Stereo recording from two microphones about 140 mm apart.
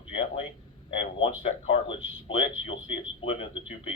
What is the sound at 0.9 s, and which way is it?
A man's voice, 40° left (ahead or behind).